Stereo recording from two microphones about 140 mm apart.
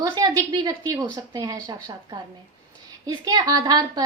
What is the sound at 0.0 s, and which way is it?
A woman's voice, 30° right (ahead or behind).